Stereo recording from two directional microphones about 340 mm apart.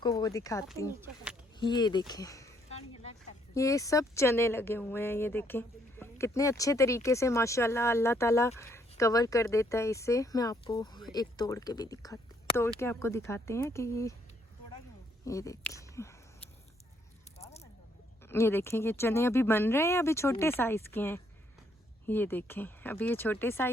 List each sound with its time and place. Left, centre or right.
0.0 s speech: centre
1.0 s speech: centre
1.5 s a sound: centre
3.5 s speech: centre
15.2 s speech: centre
17.3 s snake: centre
18.3 s speech: centre